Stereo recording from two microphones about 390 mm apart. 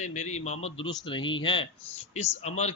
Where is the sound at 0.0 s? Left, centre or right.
Centre.